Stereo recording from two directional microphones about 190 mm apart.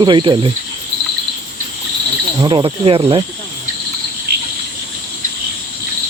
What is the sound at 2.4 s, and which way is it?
Speech, 25° right (ahead or behind).